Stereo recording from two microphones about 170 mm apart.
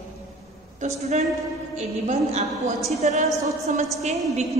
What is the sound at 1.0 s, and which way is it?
A woman's voice, 40° right (ahead or behind).